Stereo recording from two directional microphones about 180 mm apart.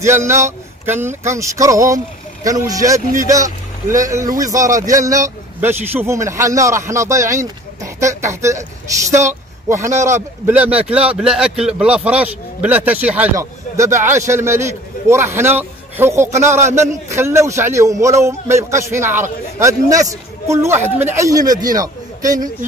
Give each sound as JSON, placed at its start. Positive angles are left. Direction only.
{"t": 0.0, "sound": "speech", "side_deg": -15}